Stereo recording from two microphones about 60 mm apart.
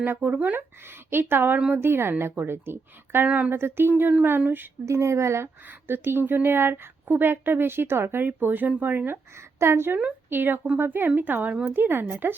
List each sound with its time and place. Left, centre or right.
0.0 s speech: right
0.9 s speech: right
3.2 s speech: right
3.5 s speech: right
4.9 s speech: right
5.6 s speech: right
9.6 s speech: right